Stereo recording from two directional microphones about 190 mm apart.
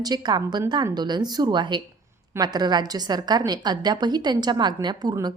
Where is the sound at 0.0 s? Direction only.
20° right (ahead or behind).